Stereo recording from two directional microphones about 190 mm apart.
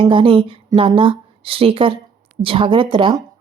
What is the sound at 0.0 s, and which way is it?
Speech, 25° right (ahead or behind).